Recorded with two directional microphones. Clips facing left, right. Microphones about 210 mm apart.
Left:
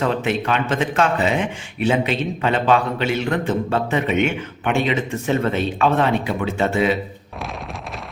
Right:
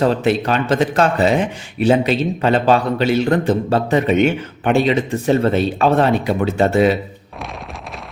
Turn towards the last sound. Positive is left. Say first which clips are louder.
# right 5 dB
turn(degrees=-40)  # may be behind; listen again after turning